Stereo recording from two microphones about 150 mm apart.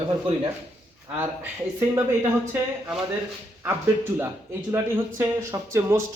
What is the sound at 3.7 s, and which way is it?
A man's voice, 15° right (ahead or behind).